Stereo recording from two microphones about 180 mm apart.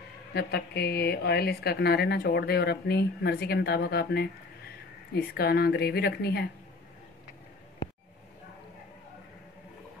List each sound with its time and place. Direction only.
0.3 s speech: 65° left (ahead or behind)